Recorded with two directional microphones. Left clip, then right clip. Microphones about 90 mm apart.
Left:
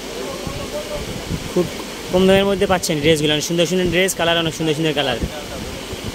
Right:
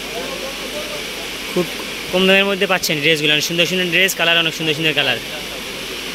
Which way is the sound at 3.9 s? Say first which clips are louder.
Right 4 dB; 45° left (ahead or behind).